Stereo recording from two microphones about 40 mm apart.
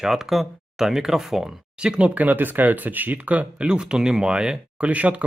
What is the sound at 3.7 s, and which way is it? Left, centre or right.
Speech, right.